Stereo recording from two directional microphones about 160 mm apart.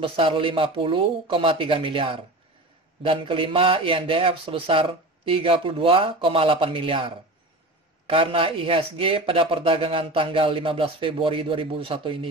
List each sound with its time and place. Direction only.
0.0 s speech: 35° right (ahead or behind)
8.1 s speech: 35° right (ahead or behind)